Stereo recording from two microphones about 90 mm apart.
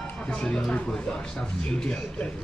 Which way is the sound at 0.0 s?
10° left (ahead or behind).